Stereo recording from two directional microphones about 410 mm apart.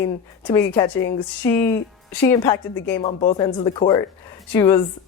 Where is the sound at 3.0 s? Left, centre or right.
Centre.